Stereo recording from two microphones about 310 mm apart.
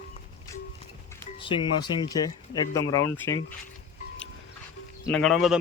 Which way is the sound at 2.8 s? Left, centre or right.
Left.